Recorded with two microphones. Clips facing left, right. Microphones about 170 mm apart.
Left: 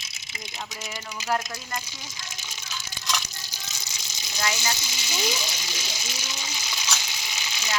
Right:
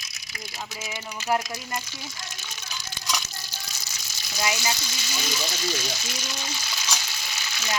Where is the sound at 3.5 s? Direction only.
15° left (ahead or behind).